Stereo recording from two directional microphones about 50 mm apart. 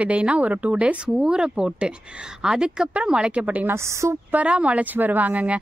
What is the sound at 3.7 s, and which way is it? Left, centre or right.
Speech, right.